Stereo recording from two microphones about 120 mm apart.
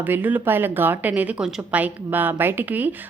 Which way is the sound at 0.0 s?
15° right (ahead or behind).